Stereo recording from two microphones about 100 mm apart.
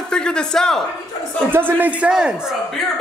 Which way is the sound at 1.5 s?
20° right (ahead or behind).